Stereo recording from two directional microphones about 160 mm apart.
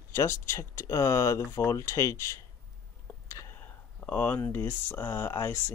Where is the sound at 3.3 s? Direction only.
20° left (ahead or behind).